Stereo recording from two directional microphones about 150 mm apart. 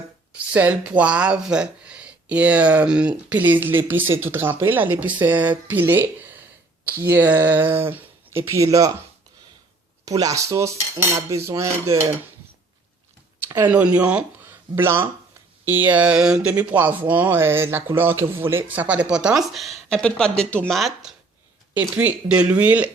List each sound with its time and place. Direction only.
0.3 s speech: 10° right (ahead or behind)
10.1 s speech: 25° right (ahead or behind)
13.6 s speech: 10° right (ahead or behind)
21.8 s speech: 10° right (ahead or behind)